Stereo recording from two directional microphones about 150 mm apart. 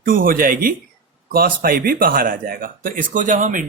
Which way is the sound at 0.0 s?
70° right (ahead or behind).